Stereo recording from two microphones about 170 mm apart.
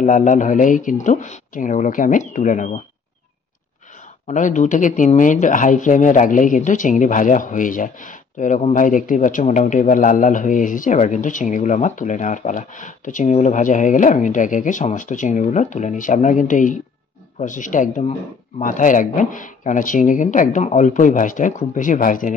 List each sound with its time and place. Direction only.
0.0 s speech: 50° left (ahead or behind)
4.3 s speech: 50° left (ahead or behind)